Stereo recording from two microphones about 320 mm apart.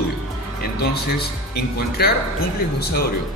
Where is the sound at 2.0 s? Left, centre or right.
Left.